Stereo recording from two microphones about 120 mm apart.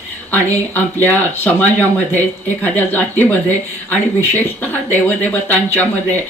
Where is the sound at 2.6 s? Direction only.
15° left (ahead or behind).